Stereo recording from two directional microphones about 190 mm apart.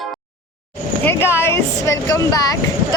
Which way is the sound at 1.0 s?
10° left (ahead or behind).